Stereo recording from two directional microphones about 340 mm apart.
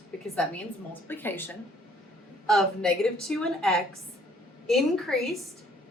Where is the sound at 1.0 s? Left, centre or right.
Centre.